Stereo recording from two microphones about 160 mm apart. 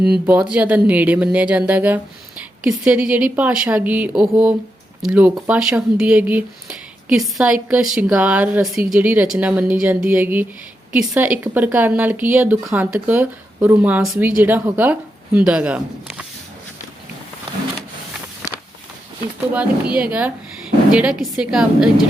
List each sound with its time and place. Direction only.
0.0 s speech: 5° right (ahead or behind)
19.5 s a woman's voice: 10° right (ahead or behind)